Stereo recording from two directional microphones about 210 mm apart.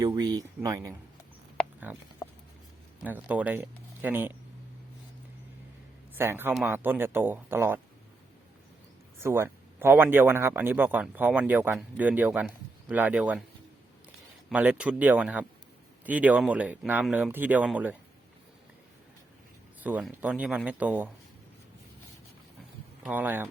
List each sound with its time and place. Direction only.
0.0 s speech: 20° right (ahead or behind)
1.5 s a sound: 10° right (ahead or behind)
2.2 s patter: 15° left (ahead or behind)
3.0 s speech: 5° right (ahead or behind)
6.1 s speech: 10° right (ahead or behind)
9.2 s speech: 10° right (ahead or behind)
14.5 s speech: 5° right (ahead or behind)
19.8 s speech: 5° right (ahead or behind)
23.0 s speech: 10° right (ahead or behind)